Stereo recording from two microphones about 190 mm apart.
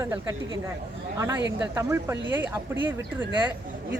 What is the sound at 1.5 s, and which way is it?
Speech, 15° right (ahead or behind).